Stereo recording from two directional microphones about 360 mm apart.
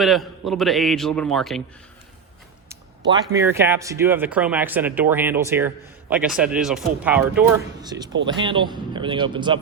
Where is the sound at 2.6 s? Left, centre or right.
Centre.